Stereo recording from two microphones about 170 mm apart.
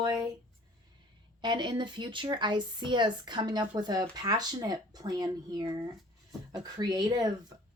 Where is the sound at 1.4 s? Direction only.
25° right (ahead or behind).